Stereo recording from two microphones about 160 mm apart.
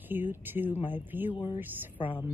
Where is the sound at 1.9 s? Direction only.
30° left (ahead or behind).